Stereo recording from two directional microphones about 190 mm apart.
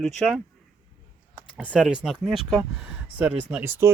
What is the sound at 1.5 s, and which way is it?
Speech, 5° right (ahead or behind).